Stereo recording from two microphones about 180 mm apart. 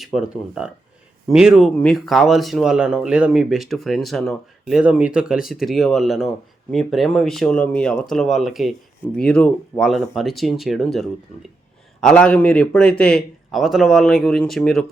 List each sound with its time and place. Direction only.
0.0 s speech: centre (ahead or behind)